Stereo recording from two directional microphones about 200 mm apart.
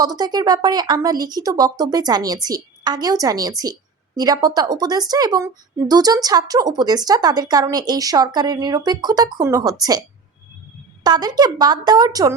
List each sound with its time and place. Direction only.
0.0 s a woman's voice: 20° right (ahead or behind)
11.0 s a woman's voice: 20° right (ahead or behind)